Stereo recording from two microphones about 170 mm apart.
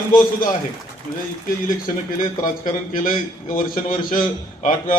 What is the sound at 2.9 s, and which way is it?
A man's voice, 55° left (ahead or behind).